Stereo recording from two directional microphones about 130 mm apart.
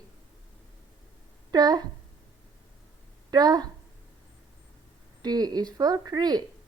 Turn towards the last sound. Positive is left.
turn(degrees=-30)  # may be behind; listen again after turning